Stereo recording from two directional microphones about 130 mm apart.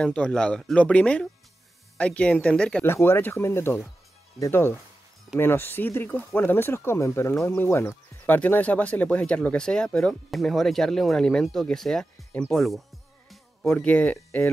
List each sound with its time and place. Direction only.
0.0 s speech: 5° left (ahead or behind)
2.8 s speech: 20° left (ahead or behind); by 12.8 s centre (ahead or behind)
13.3 s music: 5° left (ahead or behind)
14.1 s speech: 20° left (ahead or behind)